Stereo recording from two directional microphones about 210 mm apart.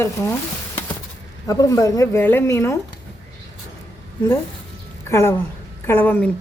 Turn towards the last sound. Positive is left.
turn(degrees=10)  # may be behind; listen again after turning